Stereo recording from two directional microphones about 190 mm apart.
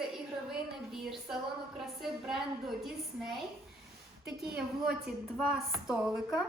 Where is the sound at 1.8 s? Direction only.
Centre (ahead or behind).